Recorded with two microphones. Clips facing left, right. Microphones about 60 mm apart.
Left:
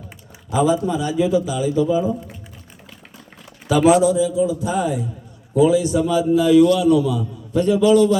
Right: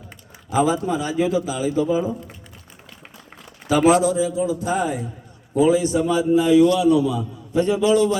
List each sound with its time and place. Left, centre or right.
0.5 s a man's voice: right
3.7 s a man's voice: right